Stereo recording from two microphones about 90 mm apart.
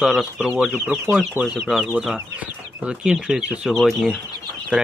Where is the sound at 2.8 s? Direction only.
10° right (ahead or behind).